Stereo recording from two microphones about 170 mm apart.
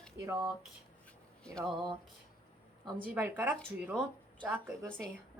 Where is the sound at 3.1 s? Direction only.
10° right (ahead or behind).